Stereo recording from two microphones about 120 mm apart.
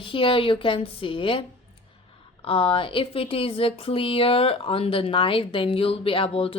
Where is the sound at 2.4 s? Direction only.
50° left (ahead or behind).